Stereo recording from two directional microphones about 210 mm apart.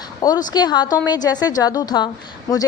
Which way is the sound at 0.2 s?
20° left (ahead or behind).